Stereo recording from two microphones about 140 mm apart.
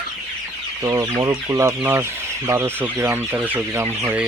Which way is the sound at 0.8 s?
25° right (ahead or behind).